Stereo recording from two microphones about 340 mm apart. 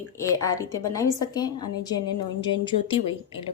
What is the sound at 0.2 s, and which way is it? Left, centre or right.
A woman's voice, centre.